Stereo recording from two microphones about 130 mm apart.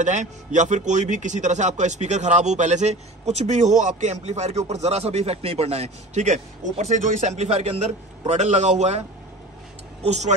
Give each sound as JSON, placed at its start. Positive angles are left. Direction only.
{"t": 0.0, "sound": "a man's voice", "side_deg": -70}
{"t": 10.0, "sound": "a man's voice", "side_deg": -60}